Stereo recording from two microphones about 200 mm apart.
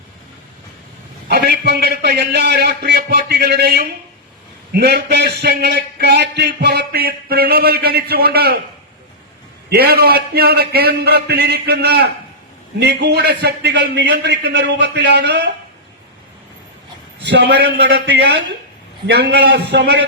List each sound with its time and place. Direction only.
1.3 s a man's voice: 55° right (ahead or behind)
9.6 s a man's voice: 50° right (ahead or behind)
17.2 s a man's voice: 60° right (ahead or behind)